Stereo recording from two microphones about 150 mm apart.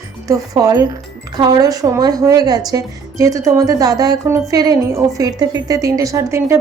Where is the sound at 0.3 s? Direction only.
25° right (ahead or behind).